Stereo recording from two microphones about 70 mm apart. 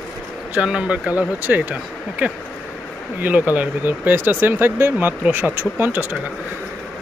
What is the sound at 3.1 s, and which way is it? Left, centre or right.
Speech, right.